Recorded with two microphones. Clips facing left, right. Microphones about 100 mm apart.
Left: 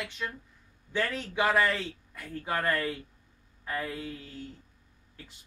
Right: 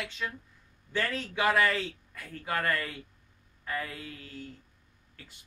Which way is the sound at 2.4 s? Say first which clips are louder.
Left 2 dB; 15° left (ahead or behind).